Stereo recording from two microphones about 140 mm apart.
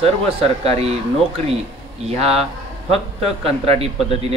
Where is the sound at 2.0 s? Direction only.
45° right (ahead or behind).